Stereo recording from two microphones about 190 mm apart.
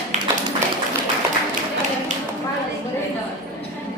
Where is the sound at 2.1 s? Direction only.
40° right (ahead or behind).